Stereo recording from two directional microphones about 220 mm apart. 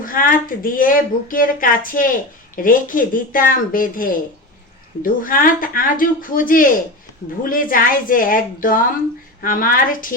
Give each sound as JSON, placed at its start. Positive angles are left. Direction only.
{"t": 0.0, "sound": "speech", "side_deg": 40}